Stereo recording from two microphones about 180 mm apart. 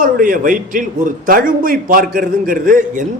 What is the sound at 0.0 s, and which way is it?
A man's voice, 50° right (ahead or behind).